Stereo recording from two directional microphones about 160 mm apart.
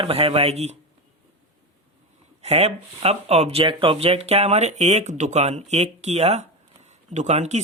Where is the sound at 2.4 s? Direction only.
40° right (ahead or behind).